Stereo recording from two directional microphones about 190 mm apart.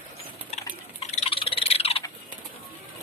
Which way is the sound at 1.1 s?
30° left (ahead or behind).